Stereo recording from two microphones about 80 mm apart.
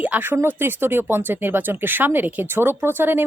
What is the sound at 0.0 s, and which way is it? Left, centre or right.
Speech, right.